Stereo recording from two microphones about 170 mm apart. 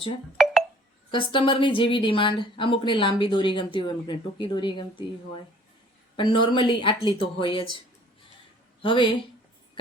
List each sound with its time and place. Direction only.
1.1 s speech: 30° left (ahead or behind)
8.8 s speech: 30° left (ahead or behind)